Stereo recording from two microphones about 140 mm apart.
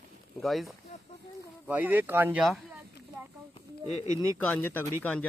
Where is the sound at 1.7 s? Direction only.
10° right (ahead or behind).